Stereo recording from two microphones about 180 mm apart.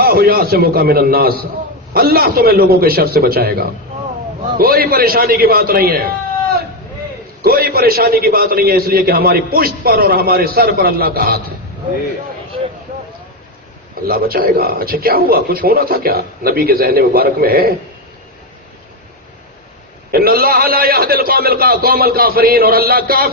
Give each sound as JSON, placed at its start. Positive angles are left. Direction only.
{"t": 0.0, "sound": "a man's voice", "side_deg": -55}
{"t": 7.4, "sound": "a man's voice", "side_deg": -55}
{"t": 14.1, "sound": "a man's voice", "side_deg": -55}
{"t": 20.1, "sound": "a man's voice", "side_deg": -55}